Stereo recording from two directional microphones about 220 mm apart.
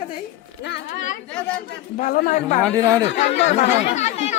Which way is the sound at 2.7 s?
15° right (ahead or behind).